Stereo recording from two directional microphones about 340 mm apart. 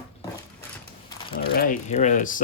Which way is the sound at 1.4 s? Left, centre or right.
Left.